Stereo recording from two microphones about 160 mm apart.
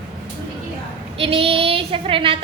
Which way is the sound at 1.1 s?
35° right (ahead or behind).